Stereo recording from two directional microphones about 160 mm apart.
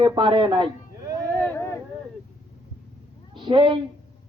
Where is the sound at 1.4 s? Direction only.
15° left (ahead or behind).